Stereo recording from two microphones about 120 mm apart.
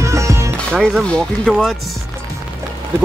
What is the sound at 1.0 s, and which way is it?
Speech, 5° left (ahead or behind).